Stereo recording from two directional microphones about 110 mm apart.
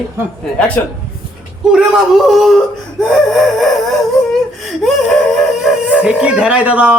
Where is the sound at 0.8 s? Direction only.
15° left (ahead or behind).